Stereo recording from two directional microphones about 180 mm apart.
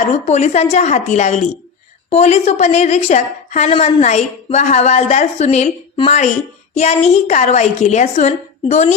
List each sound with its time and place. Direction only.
0.1 s a woman's voice: 40° left (ahead or behind)